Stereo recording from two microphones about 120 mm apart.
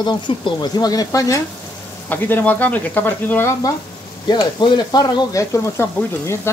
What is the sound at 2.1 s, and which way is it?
Speech, 15° left (ahead or behind).